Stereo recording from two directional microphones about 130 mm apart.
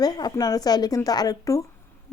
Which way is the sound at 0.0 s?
30° left (ahead or behind).